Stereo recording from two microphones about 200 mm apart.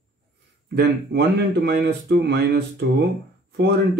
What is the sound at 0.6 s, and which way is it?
Speech, 55° right (ahead or behind).